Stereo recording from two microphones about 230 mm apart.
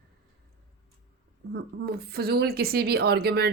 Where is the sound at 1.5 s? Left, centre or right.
Right.